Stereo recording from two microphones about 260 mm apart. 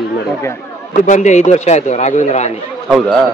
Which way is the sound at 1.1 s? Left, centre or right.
Left.